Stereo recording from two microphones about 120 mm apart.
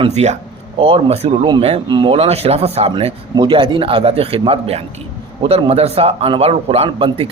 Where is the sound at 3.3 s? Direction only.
45° right (ahead or behind).